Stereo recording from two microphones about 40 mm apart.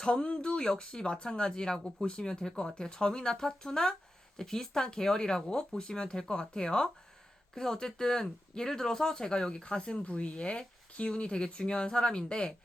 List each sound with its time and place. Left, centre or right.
0.0 s speech: left
2.0 s speech: left